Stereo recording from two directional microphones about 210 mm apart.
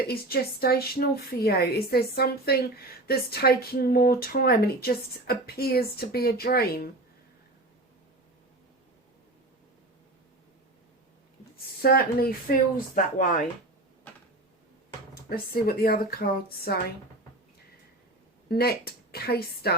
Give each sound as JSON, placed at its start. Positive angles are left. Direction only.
{"t": 0.1, "sound": "a woman's voice", "side_deg": 45}
{"t": 11.8, "sound": "a woman's voice", "side_deg": 45}
{"t": 15.1, "sound": "a woman's voice", "side_deg": 45}
{"t": 18.4, "sound": "a woman's voice", "side_deg": 50}